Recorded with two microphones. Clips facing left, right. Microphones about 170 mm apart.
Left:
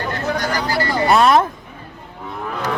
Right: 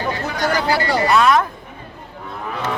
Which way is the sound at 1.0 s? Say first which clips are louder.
Left 3 dB; 35° left (ahead or behind).